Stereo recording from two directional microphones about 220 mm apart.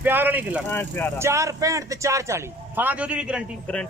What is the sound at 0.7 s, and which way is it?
Speech, 10° left (ahead or behind).